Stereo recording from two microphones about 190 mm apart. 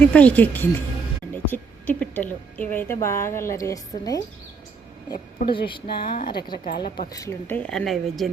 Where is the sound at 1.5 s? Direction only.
10° left (ahead or behind).